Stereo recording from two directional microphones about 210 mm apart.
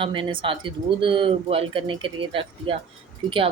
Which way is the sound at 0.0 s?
25° right (ahead or behind).